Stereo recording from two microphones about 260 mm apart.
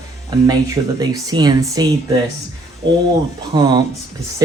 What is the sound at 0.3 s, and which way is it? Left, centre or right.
Speech, centre.